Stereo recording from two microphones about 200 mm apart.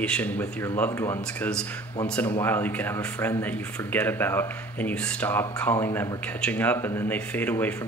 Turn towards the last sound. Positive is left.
turn(degrees=10)  # may be behind; listen again after turning